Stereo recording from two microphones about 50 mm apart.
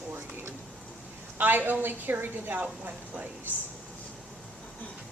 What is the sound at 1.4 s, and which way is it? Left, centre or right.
A woman's voice, right.